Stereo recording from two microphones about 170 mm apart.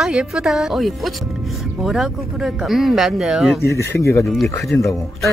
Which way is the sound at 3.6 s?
15° left (ahead or behind).